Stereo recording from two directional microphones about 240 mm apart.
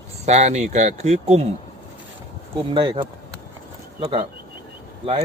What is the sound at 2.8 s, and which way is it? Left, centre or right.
Speech, right.